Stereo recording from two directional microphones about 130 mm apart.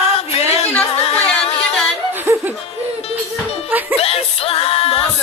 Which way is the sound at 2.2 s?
20° right (ahead or behind).